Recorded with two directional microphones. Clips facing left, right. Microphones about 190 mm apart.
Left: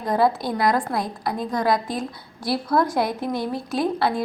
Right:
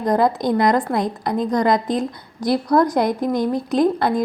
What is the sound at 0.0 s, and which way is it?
Speech, 5° left (ahead or behind).